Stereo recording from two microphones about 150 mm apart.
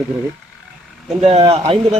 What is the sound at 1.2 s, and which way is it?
Speech, 45° right (ahead or behind).